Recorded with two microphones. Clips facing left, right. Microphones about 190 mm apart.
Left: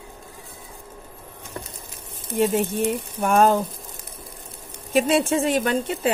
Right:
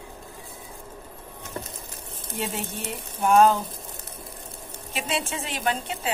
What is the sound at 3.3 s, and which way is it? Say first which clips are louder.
Speech: even; 50° left (ahead or behind).